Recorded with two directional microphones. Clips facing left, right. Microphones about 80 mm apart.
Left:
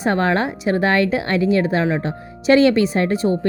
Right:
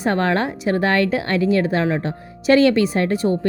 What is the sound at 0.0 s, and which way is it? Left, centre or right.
A woman's voice, centre.